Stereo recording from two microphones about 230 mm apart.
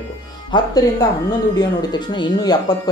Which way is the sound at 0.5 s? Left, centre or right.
Centre.